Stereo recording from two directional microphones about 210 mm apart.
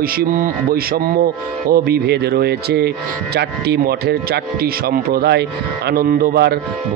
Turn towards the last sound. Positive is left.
turn(degrees=-50)  # may be behind; listen again after turning